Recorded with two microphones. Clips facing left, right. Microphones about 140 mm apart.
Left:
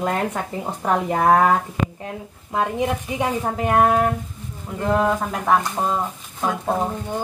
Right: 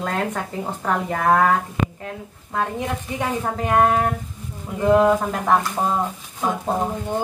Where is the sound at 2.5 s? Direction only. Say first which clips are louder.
Left 3 dB; 15° left (ahead or behind); by 5.6 s centre (ahead or behind).